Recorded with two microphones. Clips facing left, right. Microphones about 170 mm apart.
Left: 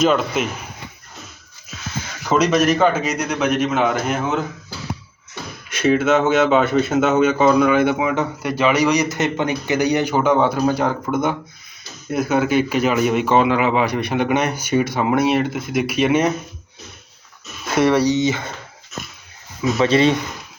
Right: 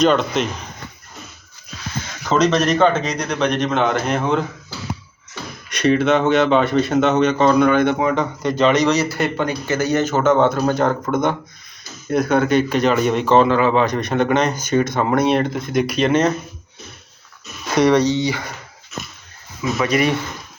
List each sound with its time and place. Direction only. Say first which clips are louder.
0.0 s speech: right 1 dB; 5° left (ahead or behind)
2.3 s speech: even; 10° left (ahead or behind)
5.6 s speech: right 1 dB; 5° left (ahead or behind)
17.7 s speech: right 1 dB; 5° left (ahead or behind); by 18.5 s 20° left (ahead or behind)
19.8 s speech: left 3 dB; 25° left (ahead or behind)